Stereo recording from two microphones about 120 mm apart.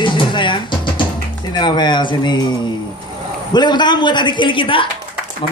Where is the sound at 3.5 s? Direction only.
35° left (ahead or behind).